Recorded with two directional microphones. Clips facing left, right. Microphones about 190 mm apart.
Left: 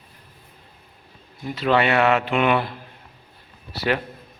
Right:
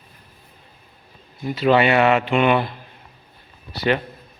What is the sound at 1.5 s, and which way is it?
A man's voice, 5° right (ahead or behind).